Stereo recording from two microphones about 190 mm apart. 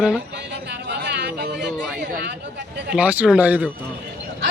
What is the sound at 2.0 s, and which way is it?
Chatter, 55° right (ahead or behind).